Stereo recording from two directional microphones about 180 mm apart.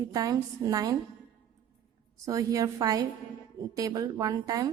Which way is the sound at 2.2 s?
20° right (ahead or behind).